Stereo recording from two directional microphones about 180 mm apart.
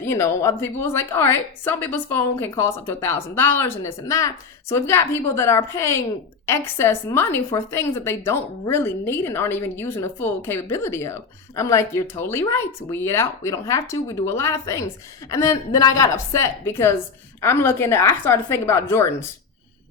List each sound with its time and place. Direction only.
0.0 s a woman's voice: 15° left (ahead or behind)